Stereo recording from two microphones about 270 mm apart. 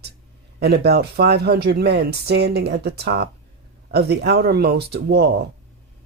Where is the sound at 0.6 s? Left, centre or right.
Right.